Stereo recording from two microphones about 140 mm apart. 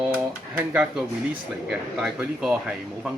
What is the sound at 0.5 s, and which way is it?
Speech, 10° right (ahead or behind).